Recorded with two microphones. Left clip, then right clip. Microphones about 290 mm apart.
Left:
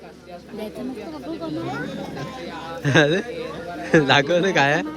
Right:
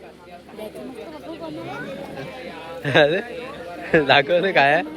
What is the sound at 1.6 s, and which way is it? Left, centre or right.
Speech, left.